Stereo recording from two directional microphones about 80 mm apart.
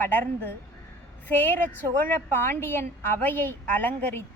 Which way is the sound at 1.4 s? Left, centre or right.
Left.